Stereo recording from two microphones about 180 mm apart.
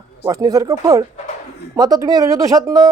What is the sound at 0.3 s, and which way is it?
Speech, 20° right (ahead or behind).